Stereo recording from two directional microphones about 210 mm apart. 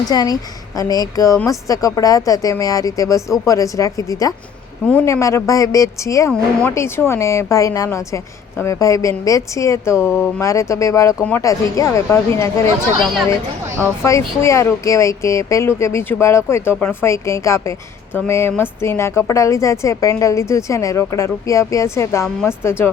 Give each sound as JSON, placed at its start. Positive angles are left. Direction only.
{"t": 0.0, "sound": "speech", "side_deg": 20}
{"t": 14.0, "sound": "speech", "side_deg": 15}